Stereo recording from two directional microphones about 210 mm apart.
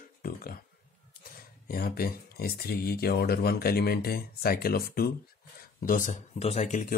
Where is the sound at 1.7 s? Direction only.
45° left (ahead or behind).